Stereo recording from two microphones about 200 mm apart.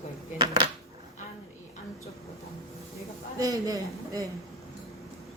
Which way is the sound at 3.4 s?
20° right (ahead or behind).